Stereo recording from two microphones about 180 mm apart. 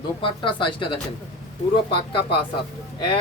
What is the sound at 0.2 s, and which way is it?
Speech, 25° left (ahead or behind).